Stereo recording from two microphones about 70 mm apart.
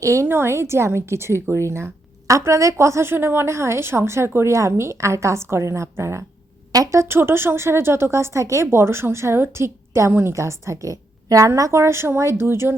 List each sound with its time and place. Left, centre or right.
0.0 s a woman's voice: right